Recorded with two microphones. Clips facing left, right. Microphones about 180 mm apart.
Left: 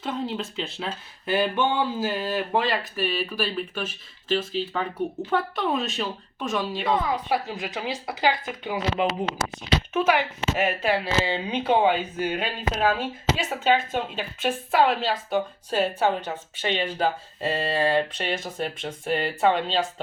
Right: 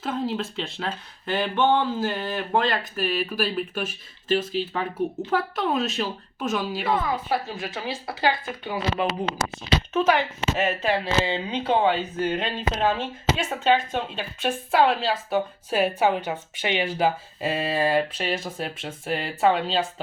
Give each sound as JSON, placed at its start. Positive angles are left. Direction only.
{"t": 0.0, "sound": "speech", "side_deg": 0}
{"t": 7.0, "sound": "a woman's voice", "side_deg": 20}